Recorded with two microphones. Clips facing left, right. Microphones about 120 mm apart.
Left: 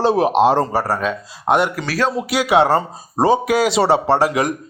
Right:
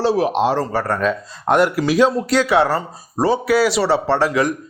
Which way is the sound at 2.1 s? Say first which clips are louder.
Right 2 dB; 10° left (ahead or behind).